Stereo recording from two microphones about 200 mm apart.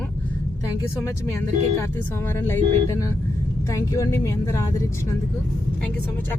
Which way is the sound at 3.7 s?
15° left (ahead or behind).